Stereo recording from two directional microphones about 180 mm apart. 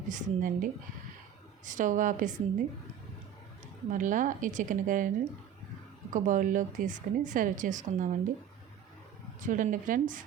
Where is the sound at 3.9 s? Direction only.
45° right (ahead or behind).